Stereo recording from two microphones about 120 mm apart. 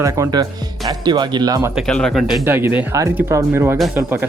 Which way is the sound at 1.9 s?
5° left (ahead or behind).